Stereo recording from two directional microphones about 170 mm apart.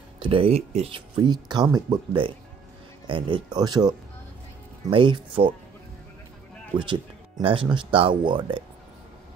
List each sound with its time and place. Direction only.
0.2 s speech: 30° right (ahead or behind)
6.8 s speech: 30° right (ahead or behind)